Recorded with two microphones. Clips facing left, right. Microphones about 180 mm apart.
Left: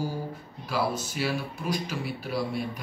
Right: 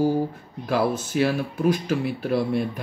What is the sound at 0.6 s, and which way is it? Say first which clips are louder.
Speech: right 6 dB; 50° right (ahead or behind).